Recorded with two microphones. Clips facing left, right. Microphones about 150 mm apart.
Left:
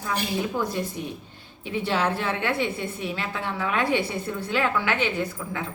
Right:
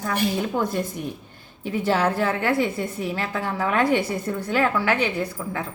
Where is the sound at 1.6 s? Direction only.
40° right (ahead or behind).